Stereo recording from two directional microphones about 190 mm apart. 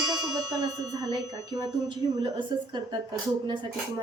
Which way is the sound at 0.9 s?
20° right (ahead or behind).